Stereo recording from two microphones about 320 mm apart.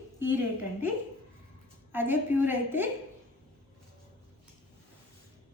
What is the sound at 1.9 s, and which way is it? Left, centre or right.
Speech, centre.